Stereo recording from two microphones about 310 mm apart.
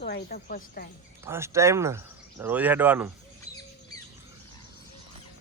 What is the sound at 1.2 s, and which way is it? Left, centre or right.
Speech, centre.